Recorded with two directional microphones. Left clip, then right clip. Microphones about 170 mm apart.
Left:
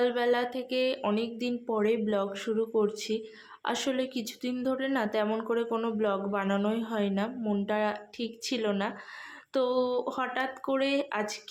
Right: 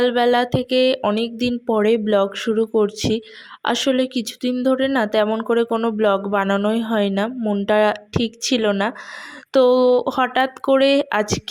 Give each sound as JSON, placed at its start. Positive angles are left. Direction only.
{"t": 0.0, "sound": "speech", "side_deg": -45}